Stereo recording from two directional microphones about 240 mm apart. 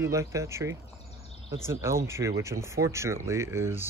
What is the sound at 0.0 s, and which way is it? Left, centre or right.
Speech, centre.